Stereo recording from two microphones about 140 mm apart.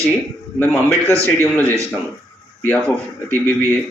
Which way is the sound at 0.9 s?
15° left (ahead or behind).